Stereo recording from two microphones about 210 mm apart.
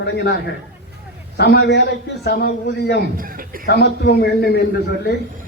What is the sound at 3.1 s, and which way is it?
Speech, 45° right (ahead or behind).